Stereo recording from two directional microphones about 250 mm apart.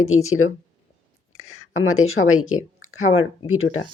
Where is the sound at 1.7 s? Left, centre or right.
Left.